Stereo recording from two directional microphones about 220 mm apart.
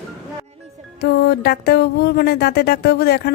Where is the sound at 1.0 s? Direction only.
45° left (ahead or behind).